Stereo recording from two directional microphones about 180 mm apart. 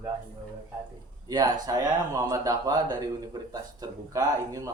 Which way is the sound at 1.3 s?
20° right (ahead or behind).